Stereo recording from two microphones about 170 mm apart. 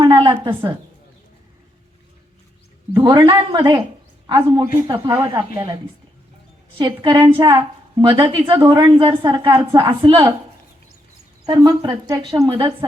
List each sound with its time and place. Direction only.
0.0 s a sound: 30° right (ahead or behind)
2.9 s a woman's voice: 25° right (ahead or behind)
4.9 s speech: 15° right (ahead or behind)
6.7 s a woman's voice: 30° right (ahead or behind)
11.4 s a woman's voice: 25° right (ahead or behind)